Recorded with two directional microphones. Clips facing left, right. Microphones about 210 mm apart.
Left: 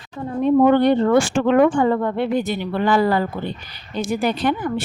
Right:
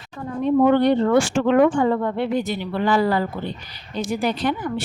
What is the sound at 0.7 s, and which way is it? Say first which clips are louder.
Speech: left 1 dB; 55° left (ahead or behind).